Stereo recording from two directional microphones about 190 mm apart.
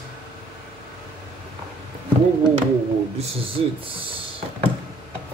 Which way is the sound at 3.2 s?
30° right (ahead or behind).